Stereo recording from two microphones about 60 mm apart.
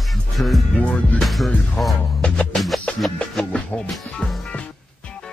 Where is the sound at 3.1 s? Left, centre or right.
Centre.